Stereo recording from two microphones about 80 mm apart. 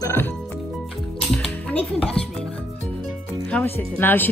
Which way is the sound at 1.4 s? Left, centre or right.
Centre.